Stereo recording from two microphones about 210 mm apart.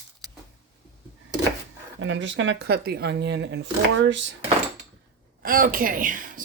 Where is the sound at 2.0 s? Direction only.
60° right (ahead or behind).